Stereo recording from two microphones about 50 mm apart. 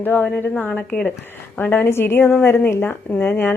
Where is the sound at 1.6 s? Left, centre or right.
Left.